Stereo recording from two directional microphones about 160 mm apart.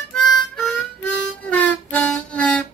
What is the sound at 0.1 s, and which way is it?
Harmonica, 5° left (ahead or behind).